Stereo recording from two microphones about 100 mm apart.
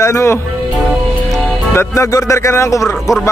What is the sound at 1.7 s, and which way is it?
Speech, 30° left (ahead or behind).